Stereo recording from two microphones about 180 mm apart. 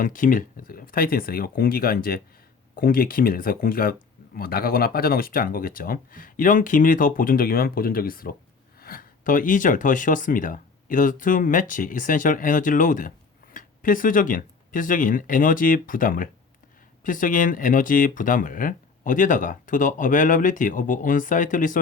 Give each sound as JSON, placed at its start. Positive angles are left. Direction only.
{"t": 0.0, "sound": "speech", "side_deg": 50}